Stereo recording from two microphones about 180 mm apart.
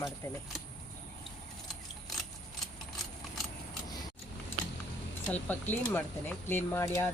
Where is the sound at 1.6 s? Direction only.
Centre (ahead or behind).